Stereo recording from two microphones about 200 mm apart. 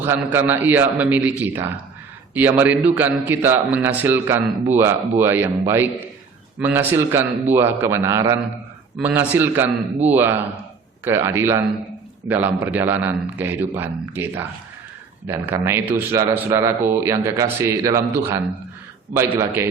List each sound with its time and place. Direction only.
0.0 s a man's voice: 10° right (ahead or behind)